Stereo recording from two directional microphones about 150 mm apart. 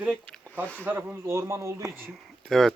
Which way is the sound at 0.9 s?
15° right (ahead or behind).